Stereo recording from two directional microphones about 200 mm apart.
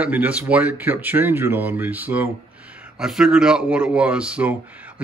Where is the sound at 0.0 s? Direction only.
10° right (ahead or behind).